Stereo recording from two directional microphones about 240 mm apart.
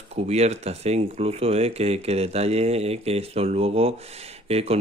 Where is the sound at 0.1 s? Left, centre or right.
Right.